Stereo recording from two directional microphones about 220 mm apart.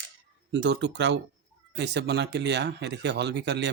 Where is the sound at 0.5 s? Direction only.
55° right (ahead or behind).